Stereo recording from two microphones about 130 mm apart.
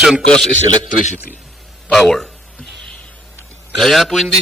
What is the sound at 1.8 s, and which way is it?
Speech, centre (ahead or behind).